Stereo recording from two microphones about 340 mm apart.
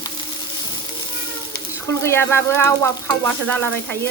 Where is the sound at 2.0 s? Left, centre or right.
Centre.